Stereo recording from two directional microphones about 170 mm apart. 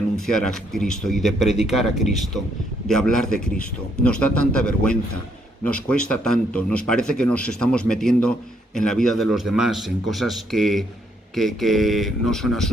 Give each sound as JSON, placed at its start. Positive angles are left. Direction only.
{"t": 0.2, "sound": "a man's voice", "side_deg": 5}